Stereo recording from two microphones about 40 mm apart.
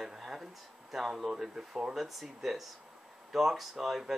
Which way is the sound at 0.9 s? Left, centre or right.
Centre.